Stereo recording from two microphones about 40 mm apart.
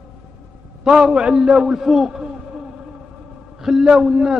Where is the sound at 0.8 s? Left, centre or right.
Centre.